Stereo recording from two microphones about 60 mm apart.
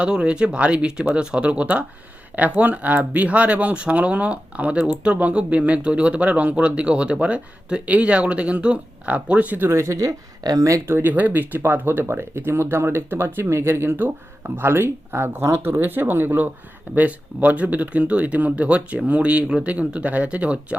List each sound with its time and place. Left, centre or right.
0.0 s speech: centre
9.6 s speech: right
10.8 s speech: right
11.1 s speech: right